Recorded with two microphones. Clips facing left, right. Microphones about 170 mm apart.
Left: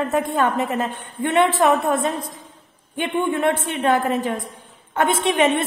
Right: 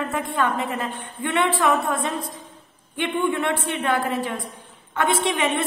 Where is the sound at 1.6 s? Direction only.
45° left (ahead or behind).